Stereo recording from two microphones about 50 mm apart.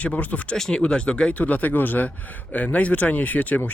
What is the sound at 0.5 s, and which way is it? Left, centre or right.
Speech, centre.